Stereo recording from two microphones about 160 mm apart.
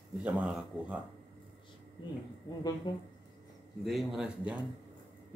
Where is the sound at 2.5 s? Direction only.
25° left (ahead or behind).